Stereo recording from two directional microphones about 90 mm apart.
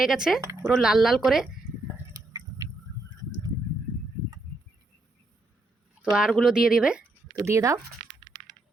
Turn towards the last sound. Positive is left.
turn(degrees=-35)  # may be behind; listen again after turning